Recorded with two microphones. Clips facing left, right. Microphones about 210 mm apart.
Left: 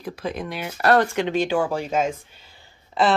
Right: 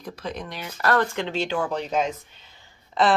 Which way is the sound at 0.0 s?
10° left (ahead or behind).